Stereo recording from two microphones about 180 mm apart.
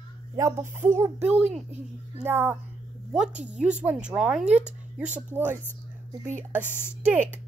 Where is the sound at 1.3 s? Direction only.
40° right (ahead or behind).